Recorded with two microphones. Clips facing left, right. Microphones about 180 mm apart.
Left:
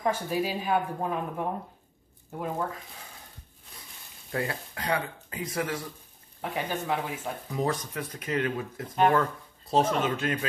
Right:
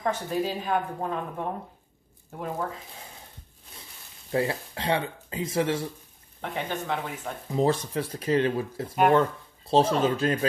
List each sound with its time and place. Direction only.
0.0 s speech: 10° left (ahead or behind)
4.3 s speech: 25° right (ahead or behind)
6.4 s speech: 5° left (ahead or behind)
7.5 s speech: 30° right (ahead or behind)